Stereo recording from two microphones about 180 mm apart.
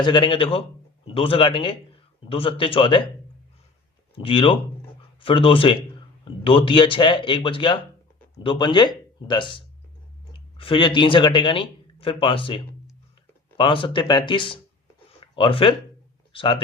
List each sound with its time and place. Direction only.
0.0 s a man's voice: 25° left (ahead or behind)
4.1 s speech: 30° left (ahead or behind)